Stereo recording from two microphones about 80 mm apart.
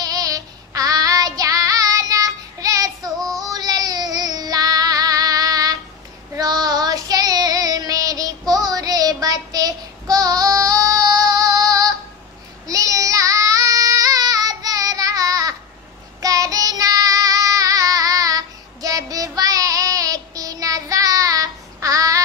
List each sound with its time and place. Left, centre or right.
0.0 s child singing: right
3.4 s female singing: right
6.3 s child singing: right